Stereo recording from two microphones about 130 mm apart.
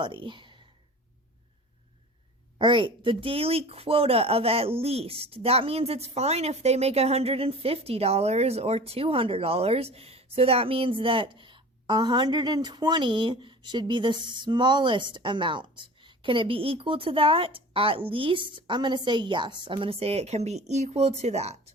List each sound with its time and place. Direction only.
0.0 s speech: 40° right (ahead or behind)
2.6 s speech: 40° right (ahead or behind); by 21.7 s 55° right (ahead or behind)